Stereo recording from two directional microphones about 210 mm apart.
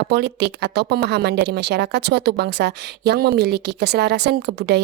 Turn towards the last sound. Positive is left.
turn(degrees=-55)  # may be behind; listen again after turning